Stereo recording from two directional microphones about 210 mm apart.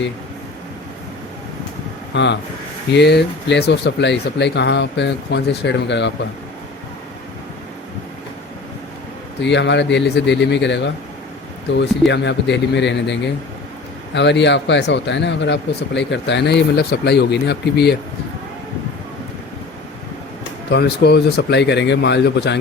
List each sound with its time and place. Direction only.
2.1 s speech: 55° left (ahead or behind)
9.4 s speech: 55° left (ahead or behind)
20.7 s speech: 50° left (ahead or behind)